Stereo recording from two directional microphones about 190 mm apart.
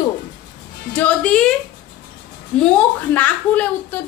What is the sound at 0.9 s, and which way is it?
Speech, 5° left (ahead or behind).